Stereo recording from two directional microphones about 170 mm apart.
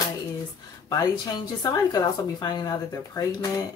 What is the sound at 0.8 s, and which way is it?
Speech, 20° left (ahead or behind).